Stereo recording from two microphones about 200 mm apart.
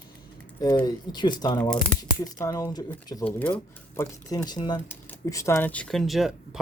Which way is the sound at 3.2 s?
5° left (ahead or behind).